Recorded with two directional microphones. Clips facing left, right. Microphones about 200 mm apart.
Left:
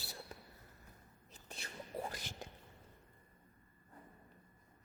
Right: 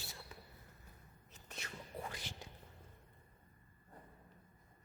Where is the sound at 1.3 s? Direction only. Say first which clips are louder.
Even; 30° left (ahead or behind).